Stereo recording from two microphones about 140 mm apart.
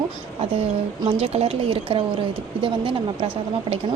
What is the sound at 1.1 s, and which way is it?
Speech, 45° right (ahead or behind).